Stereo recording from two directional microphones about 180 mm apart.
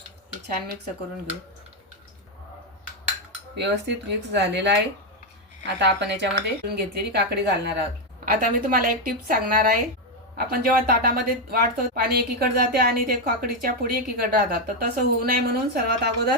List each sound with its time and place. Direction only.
3.6 s speech: 75° right (ahead or behind)
5.6 s speech: 75° right (ahead or behind)
8.3 s speech: 50° right (ahead or behind)